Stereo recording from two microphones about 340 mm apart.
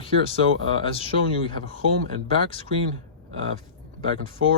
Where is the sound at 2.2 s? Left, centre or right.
Centre.